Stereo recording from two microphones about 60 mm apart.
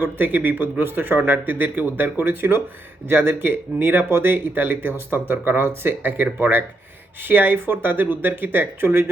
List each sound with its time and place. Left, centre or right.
0.0 s speech: right